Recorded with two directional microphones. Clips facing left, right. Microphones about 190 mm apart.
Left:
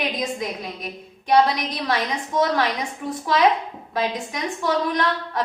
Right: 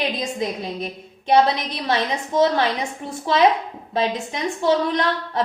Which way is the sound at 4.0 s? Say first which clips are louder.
Right 2 dB; 25° right (ahead or behind).